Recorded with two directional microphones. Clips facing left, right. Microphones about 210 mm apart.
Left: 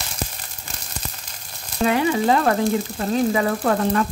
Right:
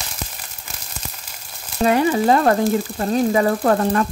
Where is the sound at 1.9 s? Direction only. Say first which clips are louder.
Right 3 dB; 40° right (ahead or behind).